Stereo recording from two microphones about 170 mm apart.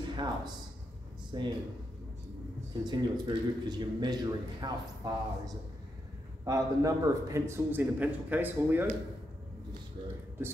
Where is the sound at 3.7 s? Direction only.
25° right (ahead or behind).